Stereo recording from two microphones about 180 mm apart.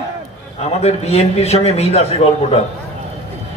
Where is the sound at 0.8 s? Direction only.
35° left (ahead or behind).